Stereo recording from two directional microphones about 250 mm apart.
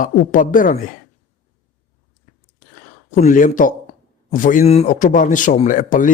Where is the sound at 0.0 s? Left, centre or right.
Left.